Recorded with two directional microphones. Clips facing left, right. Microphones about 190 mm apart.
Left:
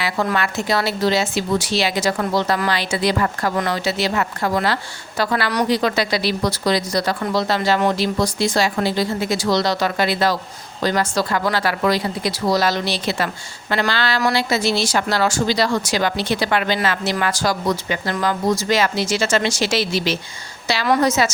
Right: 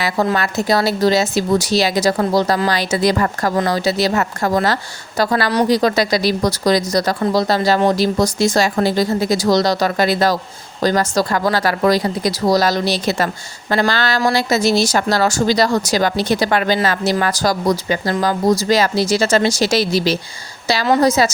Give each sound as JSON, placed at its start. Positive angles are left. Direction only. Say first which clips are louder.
{"t": 0.3, "sound": "speech", "louder": "right 3 dB", "side_deg": -40}